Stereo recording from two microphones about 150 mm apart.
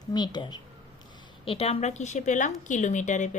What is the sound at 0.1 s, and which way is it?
Speech, 30° left (ahead or behind).